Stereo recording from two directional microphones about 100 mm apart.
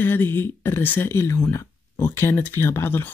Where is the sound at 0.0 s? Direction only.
20° left (ahead or behind).